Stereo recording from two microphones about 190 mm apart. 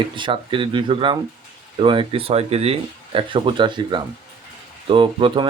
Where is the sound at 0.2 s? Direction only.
25° right (ahead or behind).